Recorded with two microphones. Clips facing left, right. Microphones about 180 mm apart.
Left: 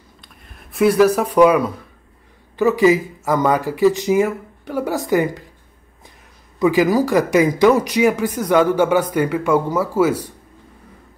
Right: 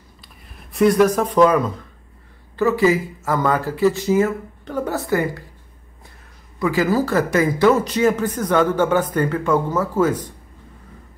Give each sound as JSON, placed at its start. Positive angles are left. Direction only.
{"t": 0.5, "sound": "speech", "side_deg": 0}
{"t": 6.6, "sound": "speech", "side_deg": 15}